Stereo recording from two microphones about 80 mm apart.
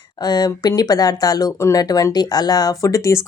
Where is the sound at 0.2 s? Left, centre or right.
Left.